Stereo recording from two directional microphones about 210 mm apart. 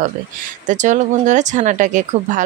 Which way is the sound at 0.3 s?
40° right (ahead or behind).